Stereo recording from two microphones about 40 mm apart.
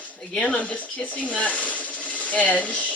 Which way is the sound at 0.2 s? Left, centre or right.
Left.